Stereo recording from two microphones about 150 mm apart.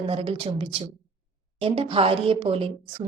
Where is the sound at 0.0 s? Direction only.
40° right (ahead or behind).